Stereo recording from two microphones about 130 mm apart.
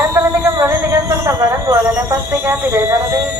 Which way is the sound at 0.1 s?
20° right (ahead or behind).